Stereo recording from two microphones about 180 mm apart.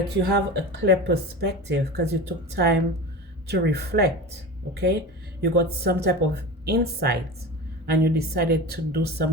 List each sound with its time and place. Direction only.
0.3 s speech: 65° right (ahead or behind)